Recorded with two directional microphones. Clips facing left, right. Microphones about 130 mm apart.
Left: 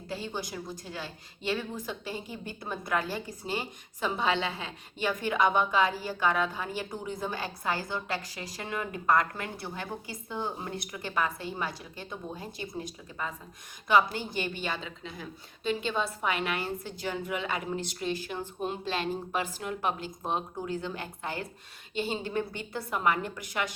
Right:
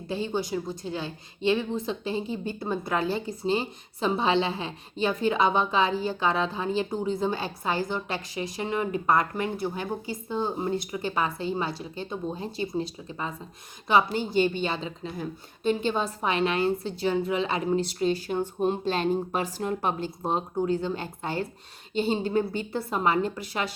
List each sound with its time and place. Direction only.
0.1 s a woman's voice: 20° right (ahead or behind)
15.2 s a woman's voice: 45° right (ahead or behind)